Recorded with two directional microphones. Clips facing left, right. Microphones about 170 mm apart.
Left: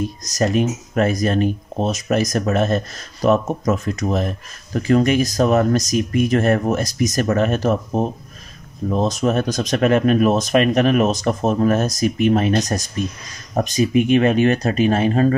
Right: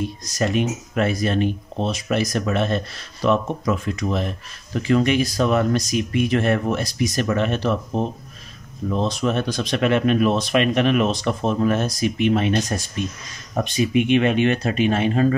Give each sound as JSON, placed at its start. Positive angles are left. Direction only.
{"t": 0.0, "sound": "speech", "side_deg": 40}